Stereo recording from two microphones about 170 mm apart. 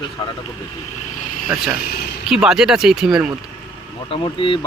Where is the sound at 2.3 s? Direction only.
5° right (ahead or behind).